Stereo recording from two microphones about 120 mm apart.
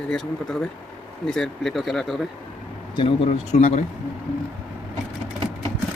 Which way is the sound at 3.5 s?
70° left (ahead or behind).